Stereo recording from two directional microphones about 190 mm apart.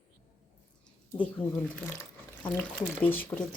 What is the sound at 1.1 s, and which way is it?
Speech, 5° left (ahead or behind).